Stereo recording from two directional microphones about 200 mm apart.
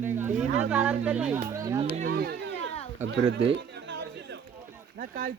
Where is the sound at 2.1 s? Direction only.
50° right (ahead or behind).